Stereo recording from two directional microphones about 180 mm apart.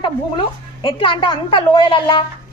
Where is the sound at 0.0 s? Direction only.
25° left (ahead or behind).